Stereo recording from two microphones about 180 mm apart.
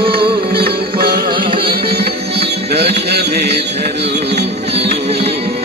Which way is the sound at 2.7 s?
65° right (ahead or behind).